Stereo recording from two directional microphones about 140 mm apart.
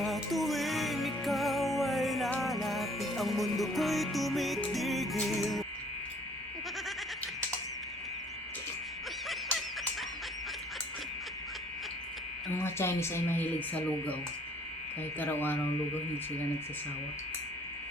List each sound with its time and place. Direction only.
0.0 s music: centre (ahead or behind)
12.6 s speech: 15° left (ahead or behind)
15.2 s speech: 15° left (ahead or behind)